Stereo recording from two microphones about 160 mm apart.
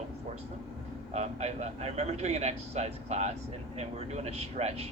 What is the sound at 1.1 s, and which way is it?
A man's voice, 45° right (ahead or behind).